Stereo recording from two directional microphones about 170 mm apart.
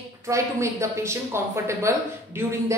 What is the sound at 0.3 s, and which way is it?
Speech, 15° right (ahead or behind).